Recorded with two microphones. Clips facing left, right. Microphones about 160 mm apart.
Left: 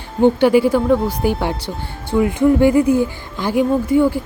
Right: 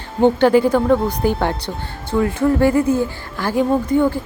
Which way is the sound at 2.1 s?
15° left (ahead or behind).